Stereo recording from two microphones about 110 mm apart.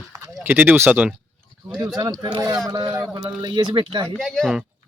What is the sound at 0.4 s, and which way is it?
Speech, 15° right (ahead or behind).